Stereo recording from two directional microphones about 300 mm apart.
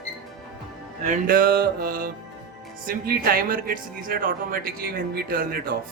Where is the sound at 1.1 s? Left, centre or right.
Right.